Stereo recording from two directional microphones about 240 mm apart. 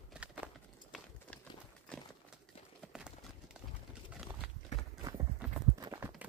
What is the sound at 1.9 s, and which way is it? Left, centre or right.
Clip-clop, centre.